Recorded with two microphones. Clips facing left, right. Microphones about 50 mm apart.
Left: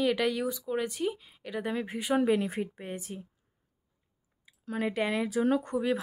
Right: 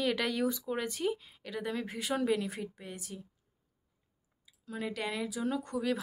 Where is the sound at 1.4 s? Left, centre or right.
Centre; by 3.2 s left.